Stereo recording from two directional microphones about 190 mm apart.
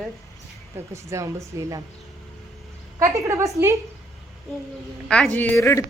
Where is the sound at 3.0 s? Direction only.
15° right (ahead or behind).